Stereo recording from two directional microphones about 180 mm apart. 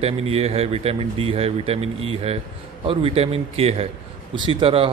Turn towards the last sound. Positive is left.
turn(degrees=-30)  # may be behind; listen again after turning